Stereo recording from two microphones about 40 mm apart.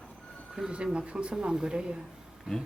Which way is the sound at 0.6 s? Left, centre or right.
Centre.